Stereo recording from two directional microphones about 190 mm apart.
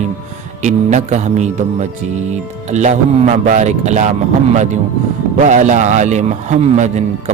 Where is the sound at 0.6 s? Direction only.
40° right (ahead or behind).